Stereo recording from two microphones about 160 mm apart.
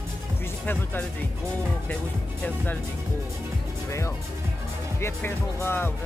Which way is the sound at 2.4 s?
10° left (ahead or behind).